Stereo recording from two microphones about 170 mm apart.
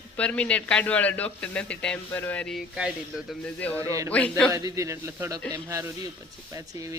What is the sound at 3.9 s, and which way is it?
A man's voice, 20° right (ahead or behind).